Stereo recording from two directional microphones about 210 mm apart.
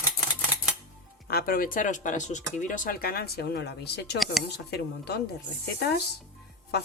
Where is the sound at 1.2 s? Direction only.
45° left (ahead or behind).